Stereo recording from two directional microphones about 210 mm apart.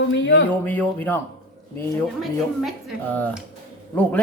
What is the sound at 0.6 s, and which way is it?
Speech, 10° left (ahead or behind).